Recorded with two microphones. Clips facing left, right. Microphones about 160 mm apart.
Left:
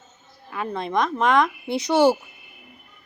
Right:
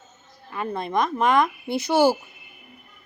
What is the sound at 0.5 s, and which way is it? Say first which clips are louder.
Speech: even; centre (ahead or behind).